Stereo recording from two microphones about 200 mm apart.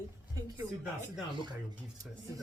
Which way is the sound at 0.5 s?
5° right (ahead or behind).